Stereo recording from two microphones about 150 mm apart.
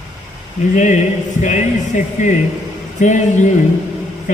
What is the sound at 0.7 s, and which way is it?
A man's voice, 55° left (ahead or behind).